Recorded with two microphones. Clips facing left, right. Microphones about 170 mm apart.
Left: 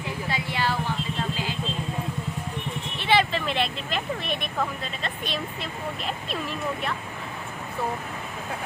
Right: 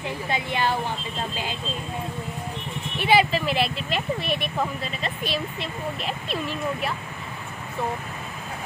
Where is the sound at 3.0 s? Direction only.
10° right (ahead or behind).